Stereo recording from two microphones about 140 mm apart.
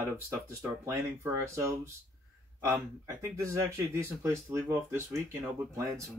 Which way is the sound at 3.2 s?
20° right (ahead or behind).